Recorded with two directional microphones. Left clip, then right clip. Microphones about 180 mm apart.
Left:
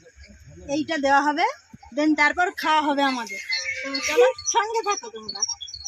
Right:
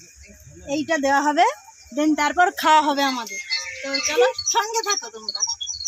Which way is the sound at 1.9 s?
65° right (ahead or behind).